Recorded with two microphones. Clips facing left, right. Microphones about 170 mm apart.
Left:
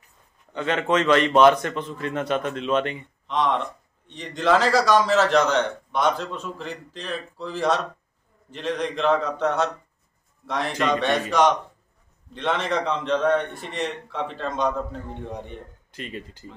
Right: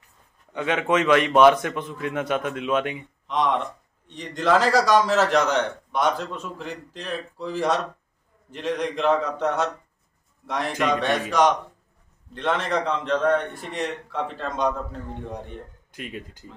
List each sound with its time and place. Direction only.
0.5 s a man's voice: 10° right (ahead or behind)
16.0 s a man's voice: 5° right (ahead or behind)